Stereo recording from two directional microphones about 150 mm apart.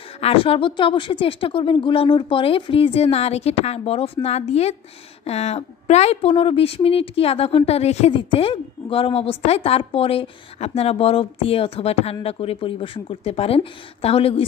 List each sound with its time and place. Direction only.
0.2 s a woman's voice: 40° left (ahead or behind)